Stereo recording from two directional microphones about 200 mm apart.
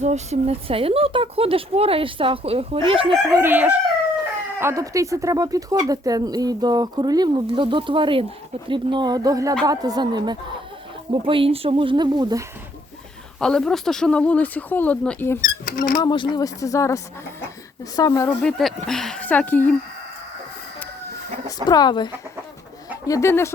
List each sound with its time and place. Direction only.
0.0 s speech: 35° right (ahead or behind)
3.3 s chicken: 10° right (ahead or behind)
4.6 s speech: 15° right (ahead or behind)
13.4 s speech: 5° left (ahead or behind)
15.4 s speech: 45° left (ahead or behind)
16.0 s speech: 25° left (ahead or behind)
18.5 s speech: centre (ahead or behind)
21.4 s speech: 20° left (ahead or behind)